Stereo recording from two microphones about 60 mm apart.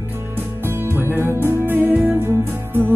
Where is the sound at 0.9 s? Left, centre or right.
Right.